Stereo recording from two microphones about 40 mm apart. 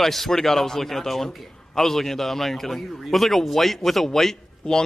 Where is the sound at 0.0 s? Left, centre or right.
Centre.